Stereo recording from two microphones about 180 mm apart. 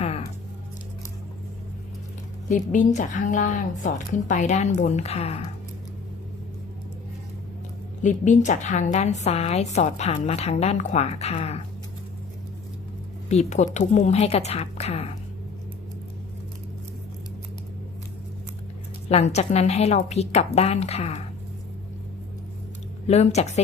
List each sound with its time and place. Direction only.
2.5 s a woman's voice: 45° left (ahead or behind)
8.0 s a woman's voice: 45° left (ahead or behind)
13.2 s a woman's voice: 40° left (ahead or behind)
19.0 s a woman's voice: 35° left (ahead or behind)
23.0 s a woman's voice: 35° left (ahead or behind)